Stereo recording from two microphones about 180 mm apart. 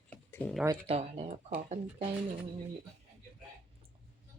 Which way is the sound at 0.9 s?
35° right (ahead or behind).